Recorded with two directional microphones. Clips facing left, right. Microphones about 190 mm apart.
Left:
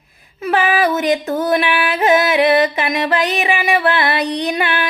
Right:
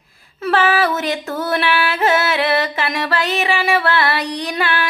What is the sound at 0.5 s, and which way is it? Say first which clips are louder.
Music: left 1 dB; 15° left (ahead or behind).